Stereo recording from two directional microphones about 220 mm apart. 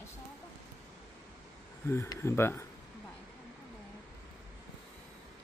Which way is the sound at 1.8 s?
10° left (ahead or behind).